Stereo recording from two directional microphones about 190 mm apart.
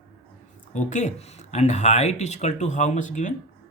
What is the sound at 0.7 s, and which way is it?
Speech, 40° left (ahead or behind).